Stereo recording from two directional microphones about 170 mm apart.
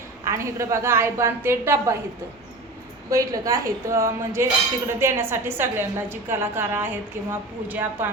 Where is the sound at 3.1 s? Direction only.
20° right (ahead or behind).